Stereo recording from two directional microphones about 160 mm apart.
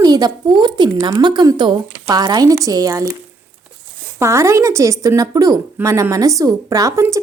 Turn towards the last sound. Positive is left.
turn(degrees=-20)  # may be behind; listen again after turning